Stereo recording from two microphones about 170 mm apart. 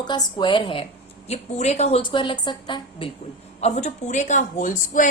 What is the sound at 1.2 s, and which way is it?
Speech, 40° left (ahead or behind).